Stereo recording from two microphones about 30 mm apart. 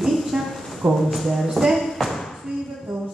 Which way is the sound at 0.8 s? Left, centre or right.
Right.